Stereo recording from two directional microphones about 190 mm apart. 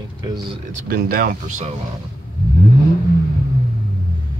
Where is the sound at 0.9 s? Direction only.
50° right (ahead or behind).